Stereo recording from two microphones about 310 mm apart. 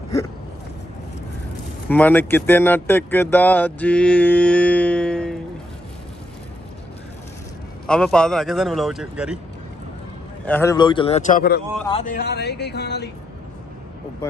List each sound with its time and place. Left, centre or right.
1.9 s speech: centre
7.8 s speech: centre
10.4 s a man's voice: centre; by 13.1 s left